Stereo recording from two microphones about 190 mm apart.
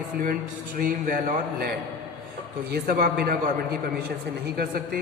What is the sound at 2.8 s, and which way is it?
Speech, 50° right (ahead or behind).